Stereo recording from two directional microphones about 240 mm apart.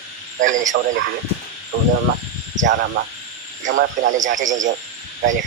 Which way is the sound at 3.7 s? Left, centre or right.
Right.